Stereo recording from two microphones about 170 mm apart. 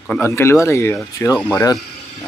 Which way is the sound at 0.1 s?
15° left (ahead or behind).